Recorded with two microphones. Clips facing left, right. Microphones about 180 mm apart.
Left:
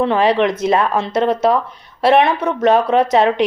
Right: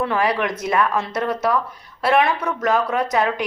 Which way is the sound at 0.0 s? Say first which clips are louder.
Left 6 dB; 25° left (ahead or behind).